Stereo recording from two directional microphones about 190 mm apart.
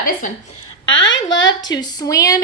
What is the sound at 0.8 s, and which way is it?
Speech, 75° left (ahead or behind).